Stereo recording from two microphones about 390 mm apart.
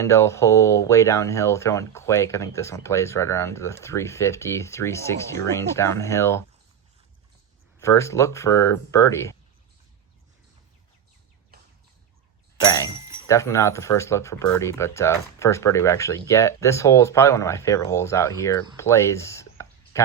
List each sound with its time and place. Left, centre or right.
0.0 s speech: centre
7.8 s speech: centre
13.2 s speech: centre
18.8 s a sound: centre